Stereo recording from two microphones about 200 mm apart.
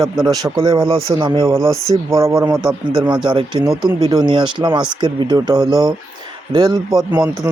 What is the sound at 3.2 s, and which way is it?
Speech, 20° right (ahead or behind).